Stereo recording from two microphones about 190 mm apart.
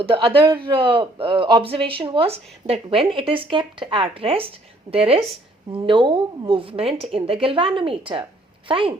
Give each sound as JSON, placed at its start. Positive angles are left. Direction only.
{"t": 0.0, "sound": "a man's voice", "side_deg": -30}